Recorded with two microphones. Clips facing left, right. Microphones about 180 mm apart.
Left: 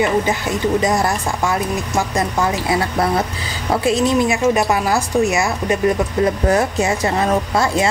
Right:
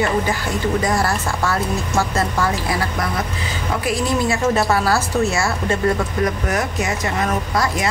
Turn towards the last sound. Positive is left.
turn(degrees=25)  # may be behind; listen again after turning